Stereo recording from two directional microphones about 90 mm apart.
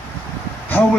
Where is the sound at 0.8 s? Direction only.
20° left (ahead or behind).